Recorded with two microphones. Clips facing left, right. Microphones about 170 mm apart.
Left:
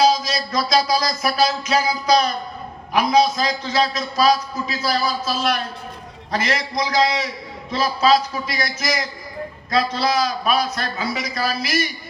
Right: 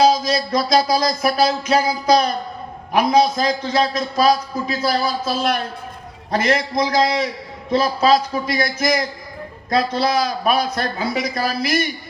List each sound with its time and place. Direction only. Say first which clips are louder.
0.0 s a man's voice: right 2 dB; 55° right (ahead or behind)